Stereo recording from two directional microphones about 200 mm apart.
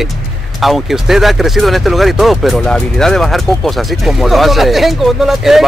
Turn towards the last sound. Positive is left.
turn(degrees=0)  # may be behind; listen again after turning